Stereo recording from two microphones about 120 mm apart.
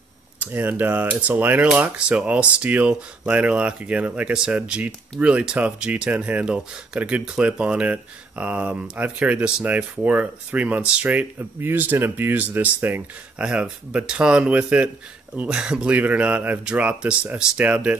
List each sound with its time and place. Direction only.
0.4 s speech: 15° right (ahead or behind)